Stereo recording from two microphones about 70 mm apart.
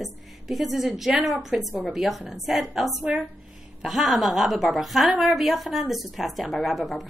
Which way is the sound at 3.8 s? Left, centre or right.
Centre.